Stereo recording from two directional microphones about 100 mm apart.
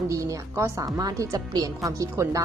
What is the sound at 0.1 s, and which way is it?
A woman's voice, 30° right (ahead or behind).